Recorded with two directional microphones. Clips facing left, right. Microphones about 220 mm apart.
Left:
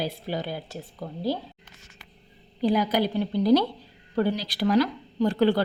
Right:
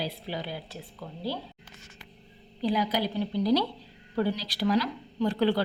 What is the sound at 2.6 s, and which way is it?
Speech, 50° left (ahead or behind).